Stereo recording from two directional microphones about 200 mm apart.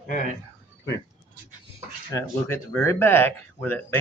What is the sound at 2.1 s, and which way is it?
Speech, 15° left (ahead or behind).